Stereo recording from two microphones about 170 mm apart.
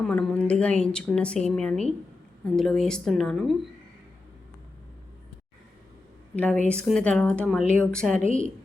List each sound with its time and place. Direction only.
0.0 s a woman's voice: 5° left (ahead or behind)
6.3 s a woman's voice: 10° left (ahead or behind)
8.2 s a woman's voice: 50° right (ahead or behind)